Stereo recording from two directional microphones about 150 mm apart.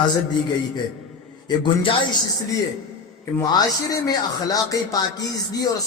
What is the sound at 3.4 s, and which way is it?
Speech, 25° left (ahead or behind).